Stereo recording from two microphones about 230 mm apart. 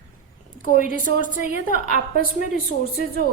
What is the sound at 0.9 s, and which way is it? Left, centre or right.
Speech, left.